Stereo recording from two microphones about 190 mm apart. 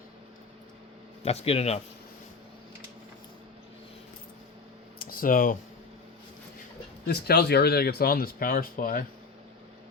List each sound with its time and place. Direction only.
1.2 s speech: 35° left (ahead or behind)
4.9 s a sound: 50° left (ahead or behind)
7.1 s speech: 60° left (ahead or behind)